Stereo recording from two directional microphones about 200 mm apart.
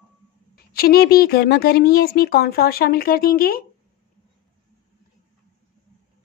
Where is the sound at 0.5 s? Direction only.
50° left (ahead or behind).